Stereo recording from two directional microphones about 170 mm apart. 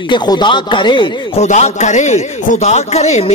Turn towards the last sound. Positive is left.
turn(degrees=40)  # may be behind; listen again after turning